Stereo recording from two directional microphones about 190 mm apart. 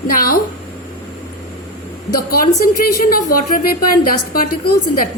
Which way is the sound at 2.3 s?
50° left (ahead or behind).